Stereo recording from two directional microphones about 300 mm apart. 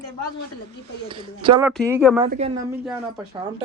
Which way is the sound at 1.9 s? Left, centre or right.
Centre.